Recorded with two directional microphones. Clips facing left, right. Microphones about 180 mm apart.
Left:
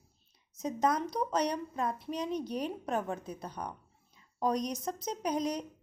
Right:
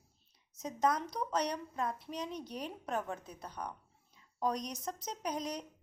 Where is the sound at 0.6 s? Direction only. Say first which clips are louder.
Left 3 dB; 15° left (ahead or behind).